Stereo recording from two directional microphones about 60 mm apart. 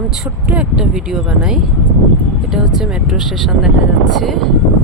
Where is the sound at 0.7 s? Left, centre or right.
Centre.